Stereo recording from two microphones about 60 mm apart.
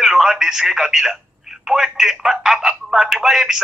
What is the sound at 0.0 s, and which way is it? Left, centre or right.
Speech, centre.